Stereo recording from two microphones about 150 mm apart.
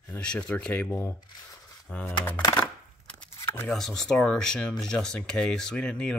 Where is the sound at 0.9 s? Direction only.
20° left (ahead or behind).